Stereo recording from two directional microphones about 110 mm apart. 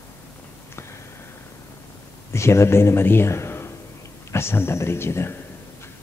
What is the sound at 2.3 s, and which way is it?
A man's voice, 25° left (ahead or behind).